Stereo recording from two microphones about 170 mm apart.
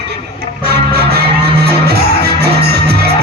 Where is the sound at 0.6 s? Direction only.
75° right (ahead or behind).